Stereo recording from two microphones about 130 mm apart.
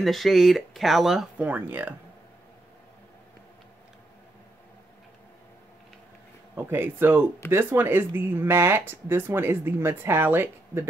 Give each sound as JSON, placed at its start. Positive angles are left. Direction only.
{"t": 0.0, "sound": "speech", "side_deg": 0}
{"t": 6.5, "sound": "speech", "side_deg": -15}